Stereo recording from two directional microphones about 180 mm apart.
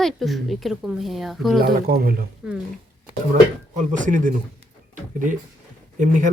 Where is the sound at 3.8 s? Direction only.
45° right (ahead or behind).